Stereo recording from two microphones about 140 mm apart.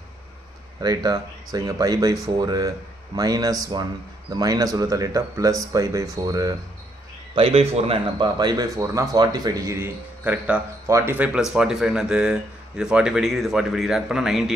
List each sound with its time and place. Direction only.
0.7 s speech: 25° right (ahead or behind)
7.3 s speech: 45° right (ahead or behind)
8.2 s speech: 30° right (ahead or behind)
10.2 s speech: 10° right (ahead or behind)